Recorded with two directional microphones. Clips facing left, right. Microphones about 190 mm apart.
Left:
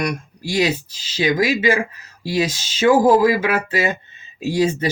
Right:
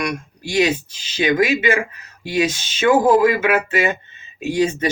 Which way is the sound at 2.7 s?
35° left (ahead or behind).